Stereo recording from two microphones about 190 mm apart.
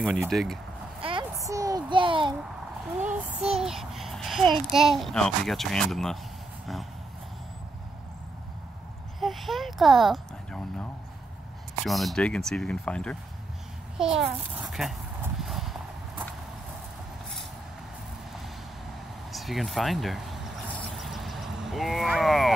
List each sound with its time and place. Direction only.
0.0 s a child's voice: 5° right (ahead or behind)
1.0 s a sound: 20° right (ahead or behind)
3.1 s child singing: 5° right (ahead or behind)
4.6 s a child's voice: centre (ahead or behind)
9.2 s a child's voice: centre (ahead or behind)
15.4 s clip-clop: centre (ahead or behind)
19.3 s a sound: centre (ahead or behind)